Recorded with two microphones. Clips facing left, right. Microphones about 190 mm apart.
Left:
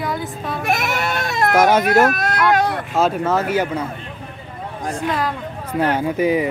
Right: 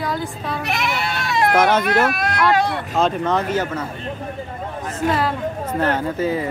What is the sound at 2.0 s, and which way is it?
Speech, 45° left (ahead or behind).